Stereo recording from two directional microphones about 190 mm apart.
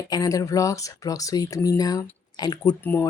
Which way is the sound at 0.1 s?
20° left (ahead or behind).